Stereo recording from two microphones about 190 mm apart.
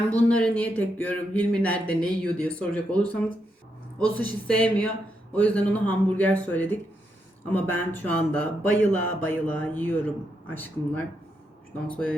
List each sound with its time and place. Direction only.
0.2 s speech: 5° left (ahead or behind)